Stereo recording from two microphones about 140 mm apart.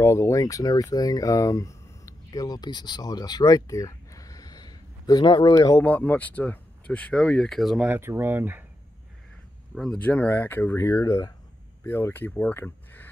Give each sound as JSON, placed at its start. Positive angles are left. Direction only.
{"t": 0.0, "sound": "speech", "side_deg": 20}
{"t": 5.9, "sound": "speech", "side_deg": 10}
{"t": 7.9, "sound": "speech", "side_deg": -15}
{"t": 9.8, "sound": "speech", "side_deg": 10}